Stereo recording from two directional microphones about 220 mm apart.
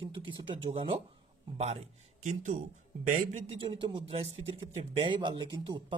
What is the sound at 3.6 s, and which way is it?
Speech, 20° right (ahead or behind).